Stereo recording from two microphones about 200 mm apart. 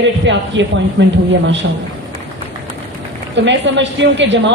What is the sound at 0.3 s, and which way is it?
A woman's voice, 65° right (ahead or behind).